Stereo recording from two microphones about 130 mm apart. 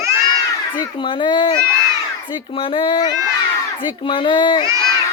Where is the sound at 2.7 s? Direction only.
35° left (ahead or behind).